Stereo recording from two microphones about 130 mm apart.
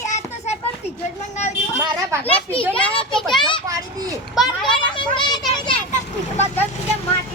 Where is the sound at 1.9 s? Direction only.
25° right (ahead or behind).